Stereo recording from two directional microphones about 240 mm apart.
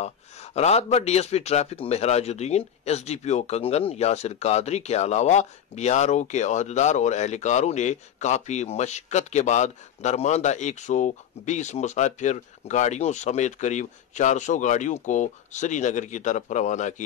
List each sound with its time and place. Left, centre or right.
0.6 s a man's voice: left